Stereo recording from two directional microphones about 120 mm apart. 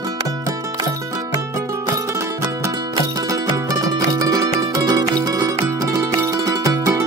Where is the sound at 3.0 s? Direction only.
35° right (ahead or behind).